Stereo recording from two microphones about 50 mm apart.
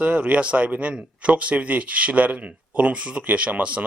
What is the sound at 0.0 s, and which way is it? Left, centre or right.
Speech, right.